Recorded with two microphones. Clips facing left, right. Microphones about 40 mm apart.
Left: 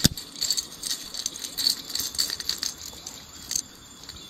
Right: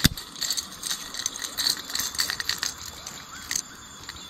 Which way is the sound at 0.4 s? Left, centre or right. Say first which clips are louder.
Left 1 dB; right.